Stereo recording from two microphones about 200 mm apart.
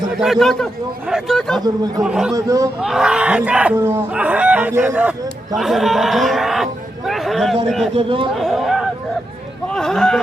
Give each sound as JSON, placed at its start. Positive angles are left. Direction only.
{"t": 0.2, "sound": "a man's voice", "side_deg": 0}
{"t": 2.3, "sound": "speech", "side_deg": -15}
{"t": 2.8, "sound": "speech", "side_deg": -5}
{"t": 5.5, "sound": "a sound", "side_deg": 0}
{"t": 7.9, "sound": "speech", "side_deg": -25}
{"t": 8.4, "sound": "chatter", "side_deg": 0}
{"t": 9.6, "sound": "a man's voice", "side_deg": 5}